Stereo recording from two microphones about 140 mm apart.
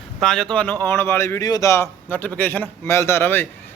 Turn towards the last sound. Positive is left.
turn(degrees=15)  # may be behind; listen again after turning